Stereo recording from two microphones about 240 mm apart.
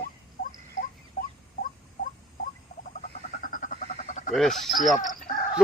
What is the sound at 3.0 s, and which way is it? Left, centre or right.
Chicken, left.